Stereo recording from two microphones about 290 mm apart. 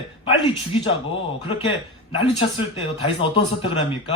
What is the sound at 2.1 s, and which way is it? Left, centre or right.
A man's voice, centre.